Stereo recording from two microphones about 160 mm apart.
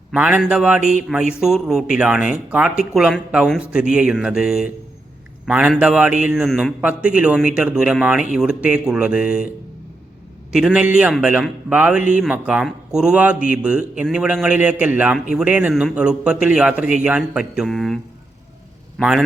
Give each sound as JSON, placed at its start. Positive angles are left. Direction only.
{"t": 0.1, "sound": "a man's voice", "side_deg": -5}
{"t": 10.5, "sound": "a man's voice", "side_deg": -5}